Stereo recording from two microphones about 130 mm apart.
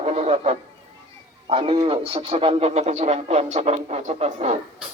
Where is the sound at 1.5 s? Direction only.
40° right (ahead or behind).